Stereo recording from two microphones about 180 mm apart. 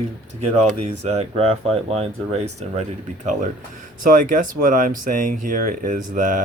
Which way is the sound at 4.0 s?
50° right (ahead or behind).